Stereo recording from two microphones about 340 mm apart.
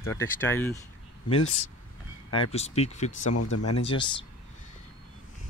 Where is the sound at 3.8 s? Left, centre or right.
Centre.